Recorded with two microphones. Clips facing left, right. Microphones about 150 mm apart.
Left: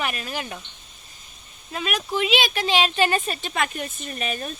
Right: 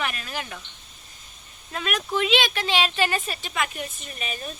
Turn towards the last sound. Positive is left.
turn(degrees=50)  # may be behind; listen again after turning